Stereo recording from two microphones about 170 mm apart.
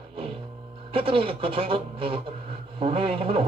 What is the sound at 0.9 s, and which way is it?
Speech, 30° right (ahead or behind).